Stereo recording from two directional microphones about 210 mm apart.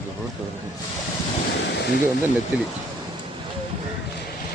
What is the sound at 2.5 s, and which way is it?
Speech, 5° right (ahead or behind).